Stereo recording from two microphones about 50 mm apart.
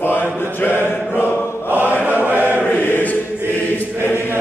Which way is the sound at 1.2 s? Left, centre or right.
Right.